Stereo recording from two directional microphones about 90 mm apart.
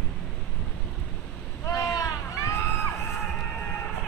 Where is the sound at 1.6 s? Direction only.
35° left (ahead or behind).